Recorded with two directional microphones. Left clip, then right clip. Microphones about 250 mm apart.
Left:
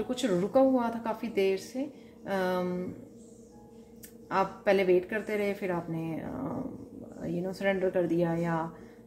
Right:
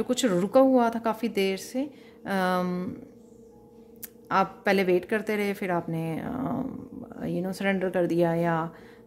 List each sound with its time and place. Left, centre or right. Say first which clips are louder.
0.1 s a woman's voice: right 5 dB; right
4.3 s a woman's voice: right 3 dB; right